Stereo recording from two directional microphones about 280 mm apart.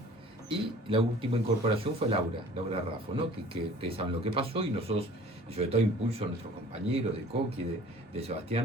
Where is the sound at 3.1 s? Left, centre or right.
Right.